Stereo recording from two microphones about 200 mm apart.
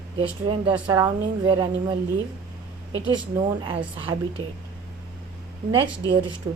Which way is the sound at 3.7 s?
25° right (ahead or behind).